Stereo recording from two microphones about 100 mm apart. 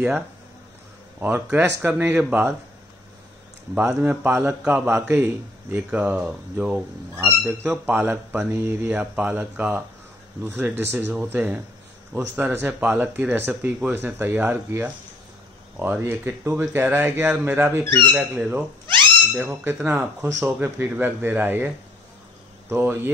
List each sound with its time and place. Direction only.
1.2 s speech: 20° right (ahead or behind)
4.0 s speech: 20° right (ahead or behind)
7.2 s speech: 25° right (ahead or behind)
15.9 s speech: 20° right (ahead or behind)
17.8 s speech: 50° right (ahead or behind)
18.1 s speech: 20° right (ahead or behind)